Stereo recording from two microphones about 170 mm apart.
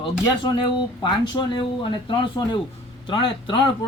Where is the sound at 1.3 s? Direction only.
30° left (ahead or behind).